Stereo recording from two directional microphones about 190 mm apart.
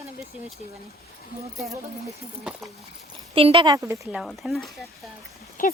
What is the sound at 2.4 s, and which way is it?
Speech, centre (ahead or behind).